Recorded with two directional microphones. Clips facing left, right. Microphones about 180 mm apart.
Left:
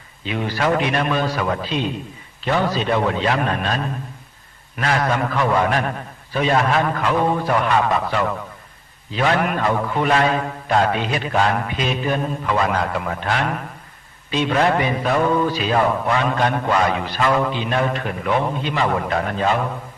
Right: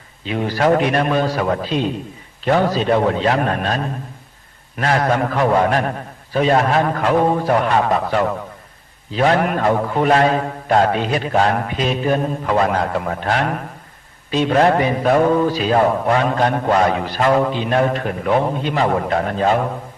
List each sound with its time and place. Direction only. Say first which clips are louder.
0.3 s mantra: right 4 dB; 40° right (ahead or behind)